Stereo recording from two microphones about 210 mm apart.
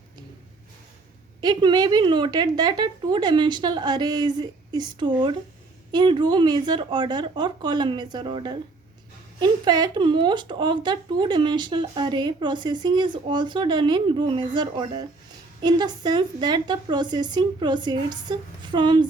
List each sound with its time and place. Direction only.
1.4 s speech: 20° right (ahead or behind)